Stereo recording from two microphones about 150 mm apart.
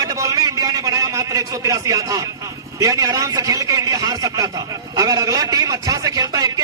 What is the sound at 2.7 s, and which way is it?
A man's voice, 25° right (ahead or behind).